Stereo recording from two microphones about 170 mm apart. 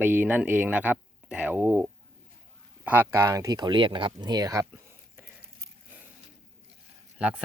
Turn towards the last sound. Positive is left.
turn(degrees=-5)  # may be behind; listen again after turning